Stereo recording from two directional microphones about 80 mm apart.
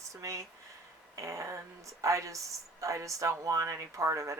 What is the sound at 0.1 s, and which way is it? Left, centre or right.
Speech, right.